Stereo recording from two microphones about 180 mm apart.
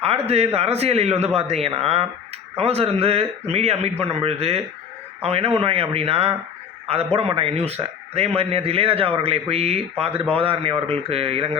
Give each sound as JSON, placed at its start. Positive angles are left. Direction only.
{"t": 0.0, "sound": "a man's voice", "side_deg": -35}